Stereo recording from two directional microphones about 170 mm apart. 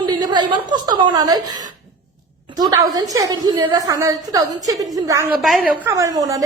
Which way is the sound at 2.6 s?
20° right (ahead or behind).